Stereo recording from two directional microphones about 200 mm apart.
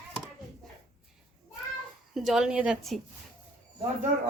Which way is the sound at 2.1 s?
Centre (ahead or behind).